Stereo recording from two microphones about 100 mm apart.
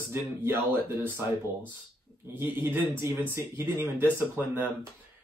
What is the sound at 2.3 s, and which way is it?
Speech, 20° right (ahead or behind).